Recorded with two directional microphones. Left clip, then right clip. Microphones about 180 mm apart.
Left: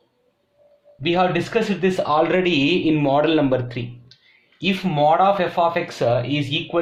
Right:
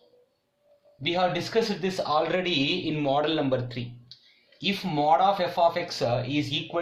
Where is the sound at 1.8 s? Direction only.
35° left (ahead or behind).